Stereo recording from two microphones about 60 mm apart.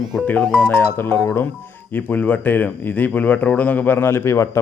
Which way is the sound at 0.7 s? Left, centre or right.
Left.